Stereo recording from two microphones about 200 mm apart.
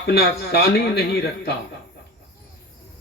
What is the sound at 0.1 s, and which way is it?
A man's voice, 55° left (ahead or behind).